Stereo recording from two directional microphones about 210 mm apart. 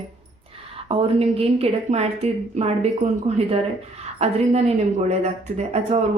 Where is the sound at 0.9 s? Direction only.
25° right (ahead or behind).